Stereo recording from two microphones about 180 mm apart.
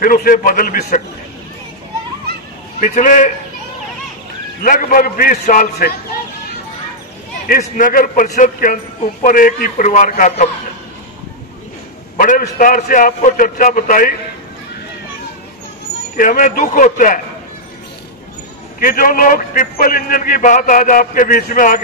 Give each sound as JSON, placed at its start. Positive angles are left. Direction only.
{"t": 0.0, "sound": "a man's voice", "side_deg": 50}
{"t": 2.8, "sound": "a man's voice", "side_deg": 45}
{"t": 4.6, "sound": "a man's voice", "side_deg": 50}
{"t": 7.4, "sound": "a man's voice", "side_deg": 50}
{"t": 12.2, "sound": "a man's voice", "side_deg": 45}
{"t": 16.2, "sound": "a man's voice", "side_deg": 50}
{"t": 18.8, "sound": "a man's voice", "side_deg": 50}